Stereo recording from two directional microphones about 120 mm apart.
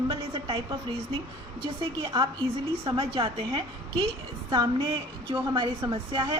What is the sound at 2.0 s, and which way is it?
A woman's voice, 40° right (ahead or behind).